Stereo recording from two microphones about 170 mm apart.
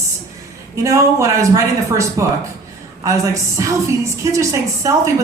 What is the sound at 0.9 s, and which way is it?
A woman's voice, 15° right (ahead or behind).